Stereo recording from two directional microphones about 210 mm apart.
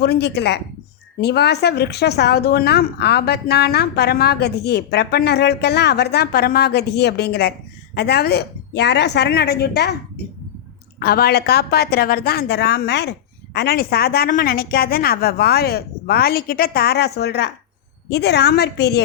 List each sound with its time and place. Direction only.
0.0 s a woman's voice: 50° left (ahead or behind)
11.0 s a woman's voice: 50° left (ahead or behind)